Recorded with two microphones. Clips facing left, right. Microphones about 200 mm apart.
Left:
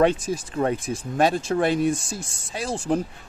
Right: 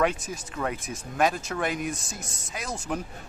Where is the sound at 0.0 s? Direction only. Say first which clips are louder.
Left 6 dB; 30° left (ahead or behind).